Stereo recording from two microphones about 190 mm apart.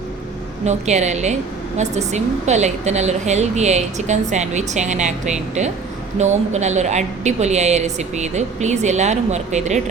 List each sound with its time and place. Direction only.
0.6 s a woman's voice: 35° right (ahead or behind)